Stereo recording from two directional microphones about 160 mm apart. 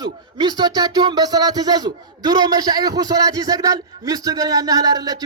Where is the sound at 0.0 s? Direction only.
25° right (ahead or behind).